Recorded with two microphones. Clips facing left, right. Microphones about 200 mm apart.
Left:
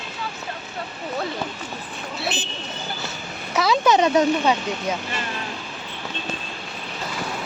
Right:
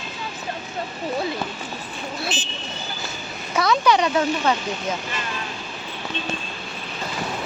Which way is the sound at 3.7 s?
20° left (ahead or behind).